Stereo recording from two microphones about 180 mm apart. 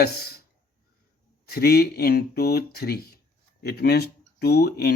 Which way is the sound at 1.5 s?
60° left (ahead or behind).